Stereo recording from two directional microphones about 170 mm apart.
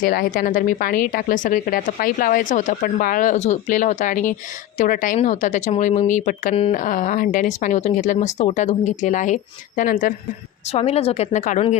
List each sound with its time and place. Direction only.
0.0 s speech: 55° left (ahead or behind)
10.7 s speech: 35° left (ahead or behind)